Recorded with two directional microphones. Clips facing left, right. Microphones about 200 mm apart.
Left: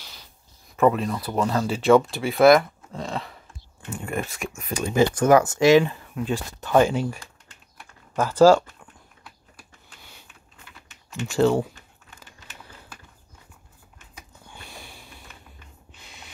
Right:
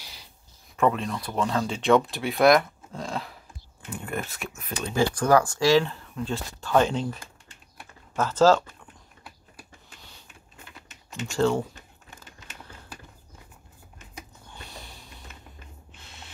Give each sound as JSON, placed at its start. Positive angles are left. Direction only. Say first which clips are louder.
{"t": 0.7, "sound": "speech", "louder": "left 4 dB", "side_deg": 5}
{"t": 8.2, "sound": "speech", "louder": "left 4 dB", "side_deg": 10}
{"t": 11.3, "sound": "speech", "louder": "left 4 dB", "side_deg": 15}